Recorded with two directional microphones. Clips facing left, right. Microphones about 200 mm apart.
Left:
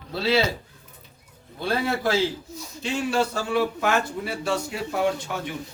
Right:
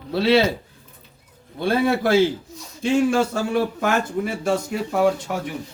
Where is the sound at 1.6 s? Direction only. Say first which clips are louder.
Right 6 dB; 55° right (ahead or behind).